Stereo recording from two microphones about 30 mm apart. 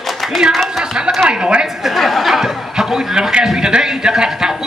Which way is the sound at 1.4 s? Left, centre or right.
Right.